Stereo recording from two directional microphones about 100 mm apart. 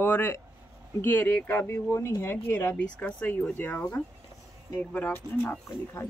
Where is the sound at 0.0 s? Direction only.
20° left (ahead or behind).